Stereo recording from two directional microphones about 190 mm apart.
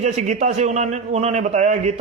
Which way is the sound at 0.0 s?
35° right (ahead or behind).